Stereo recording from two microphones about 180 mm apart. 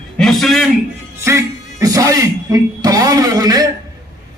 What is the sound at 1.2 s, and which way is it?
Speech, 15° right (ahead or behind).